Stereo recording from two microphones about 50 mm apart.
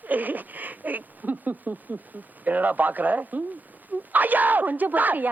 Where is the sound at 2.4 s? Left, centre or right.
Right.